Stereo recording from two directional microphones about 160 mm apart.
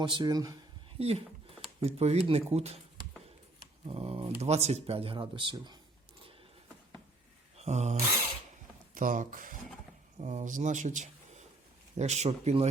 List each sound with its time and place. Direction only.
0.0 s speech: 30° right (ahead or behind)
0.9 s speech: 40° right (ahead or behind)
3.8 s speech: 40° right (ahead or behind)
7.5 s a sound: 45° right (ahead or behind)
9.0 s speech: 55° right (ahead or behind)
10.2 s speech: 45° right (ahead or behind)